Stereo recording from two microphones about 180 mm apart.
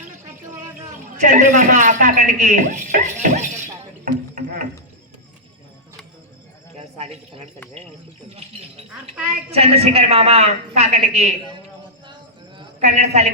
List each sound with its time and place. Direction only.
1.1 s a man's voice: 45° right (ahead or behind)
4.0 s a sound: 45° right (ahead or behind)
9.5 s a woman's voice: 35° right (ahead or behind)
12.8 s a woman's voice: 40° right (ahead or behind)